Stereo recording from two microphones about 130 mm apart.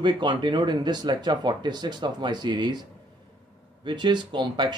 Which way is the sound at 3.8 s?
35° right (ahead or behind).